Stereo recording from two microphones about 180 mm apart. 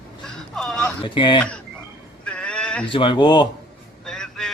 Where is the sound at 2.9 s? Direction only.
30° left (ahead or behind).